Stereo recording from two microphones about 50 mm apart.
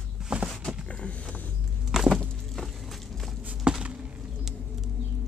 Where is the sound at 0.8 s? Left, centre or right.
Left.